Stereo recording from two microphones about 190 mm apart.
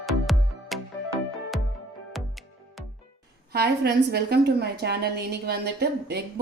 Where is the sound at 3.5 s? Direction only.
55° right (ahead or behind).